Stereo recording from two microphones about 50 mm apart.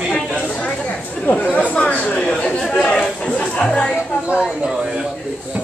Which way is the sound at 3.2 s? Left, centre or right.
Centre.